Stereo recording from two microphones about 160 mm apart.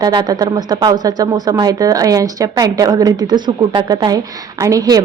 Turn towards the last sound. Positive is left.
turn(degrees=-20)  # may be behind; listen again after turning